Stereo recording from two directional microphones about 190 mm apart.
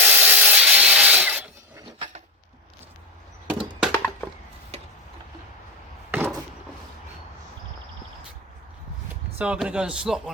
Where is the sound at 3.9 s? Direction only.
10° left (ahead or behind).